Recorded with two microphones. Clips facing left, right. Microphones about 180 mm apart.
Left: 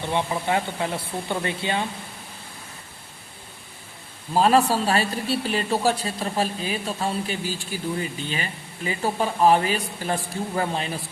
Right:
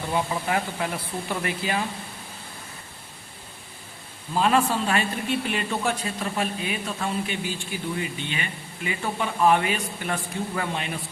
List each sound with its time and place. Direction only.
0.1 s speech: 25° left (ahead or behind)
4.4 s a man's voice: 35° left (ahead or behind)